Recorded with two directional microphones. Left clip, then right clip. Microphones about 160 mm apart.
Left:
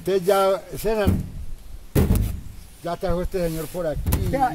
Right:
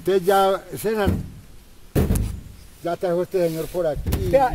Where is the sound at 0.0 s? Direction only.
25° right (ahead or behind).